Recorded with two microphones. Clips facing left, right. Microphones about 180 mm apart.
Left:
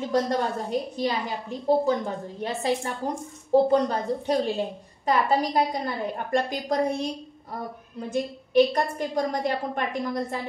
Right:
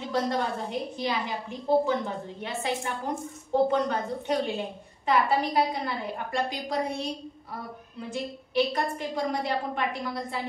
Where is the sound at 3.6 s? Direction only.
35° left (ahead or behind).